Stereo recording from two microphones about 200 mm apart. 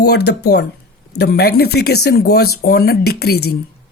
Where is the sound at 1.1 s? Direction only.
50° left (ahead or behind).